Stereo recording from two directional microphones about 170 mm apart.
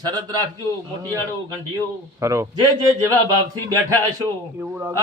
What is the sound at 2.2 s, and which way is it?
Speech, 20° right (ahead or behind).